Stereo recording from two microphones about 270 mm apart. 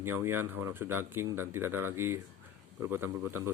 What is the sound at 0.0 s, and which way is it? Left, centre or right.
Speech, centre.